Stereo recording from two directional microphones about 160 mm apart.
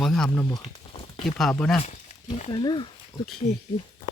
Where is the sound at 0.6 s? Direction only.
35° left (ahead or behind).